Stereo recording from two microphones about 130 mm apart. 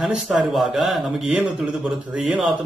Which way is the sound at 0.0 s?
5° right (ahead or behind).